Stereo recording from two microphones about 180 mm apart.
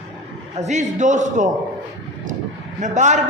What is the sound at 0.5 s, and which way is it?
Speech, 40° right (ahead or behind).